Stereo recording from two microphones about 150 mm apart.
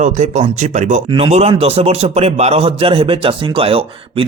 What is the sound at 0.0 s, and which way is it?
Speech, 55° right (ahead or behind).